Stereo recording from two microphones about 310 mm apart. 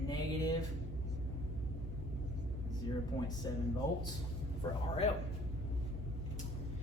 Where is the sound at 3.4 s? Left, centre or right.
Centre.